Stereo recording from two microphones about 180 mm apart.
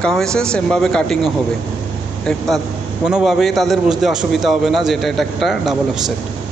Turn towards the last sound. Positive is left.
turn(degrees=0)  # may be behind; listen again after turning